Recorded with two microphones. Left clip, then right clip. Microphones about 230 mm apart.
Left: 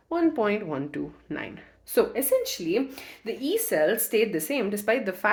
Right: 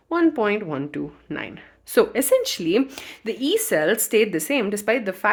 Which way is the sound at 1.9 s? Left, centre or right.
Right.